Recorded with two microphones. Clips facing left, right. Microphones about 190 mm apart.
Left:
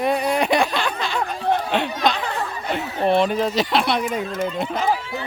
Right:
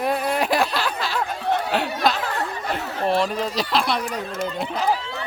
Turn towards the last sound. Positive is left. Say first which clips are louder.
# left 3 dB
turn(degrees=0)  # may be behind; listen again after turning